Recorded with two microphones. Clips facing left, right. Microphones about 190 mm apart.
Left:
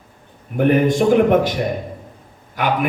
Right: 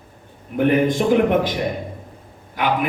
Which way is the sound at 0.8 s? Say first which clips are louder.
Left 3 dB; 50° left (ahead or behind).